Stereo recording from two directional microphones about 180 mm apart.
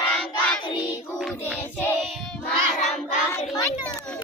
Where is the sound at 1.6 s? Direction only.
15° left (ahead or behind).